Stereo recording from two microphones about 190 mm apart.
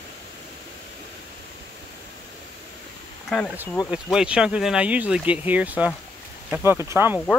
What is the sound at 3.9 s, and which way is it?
Speech, 5° right (ahead or behind).